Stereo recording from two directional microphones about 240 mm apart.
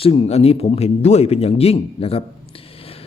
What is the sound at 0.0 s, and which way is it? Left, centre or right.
A man's voice, left.